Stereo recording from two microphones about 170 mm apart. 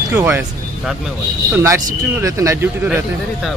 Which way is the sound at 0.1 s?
10° right (ahead or behind).